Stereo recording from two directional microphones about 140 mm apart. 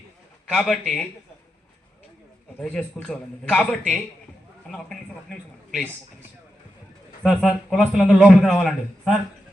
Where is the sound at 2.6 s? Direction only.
10° left (ahead or behind).